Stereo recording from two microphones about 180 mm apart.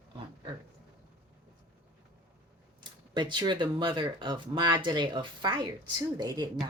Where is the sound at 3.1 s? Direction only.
25° right (ahead or behind).